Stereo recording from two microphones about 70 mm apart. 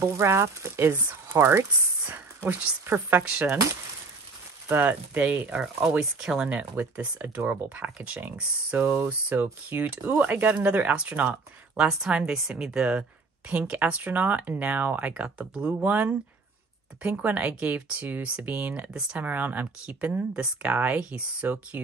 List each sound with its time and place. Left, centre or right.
0.0 s speech: right
2.0 s a sound: right
2.9 s speech: right
4.6 s speech: right
5.9 s speech: centre
6.5 s speech: right
8.7 s speech: right